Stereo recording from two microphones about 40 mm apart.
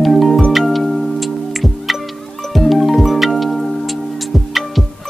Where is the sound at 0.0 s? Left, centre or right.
Centre.